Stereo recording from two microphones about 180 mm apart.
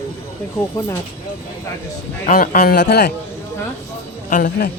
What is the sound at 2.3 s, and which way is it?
Speech, 55° left (ahead or behind).